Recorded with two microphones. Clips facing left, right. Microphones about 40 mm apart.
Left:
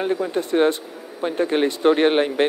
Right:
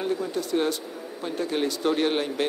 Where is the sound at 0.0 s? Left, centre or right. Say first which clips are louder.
Left 5 dB; left.